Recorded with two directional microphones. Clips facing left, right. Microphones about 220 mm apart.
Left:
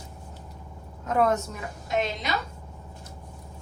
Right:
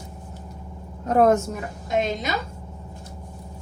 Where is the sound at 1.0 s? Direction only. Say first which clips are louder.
Right 6 dB; 45° right (ahead or behind).